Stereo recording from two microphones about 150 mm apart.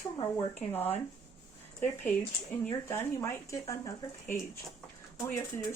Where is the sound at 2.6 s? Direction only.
15° left (ahead or behind).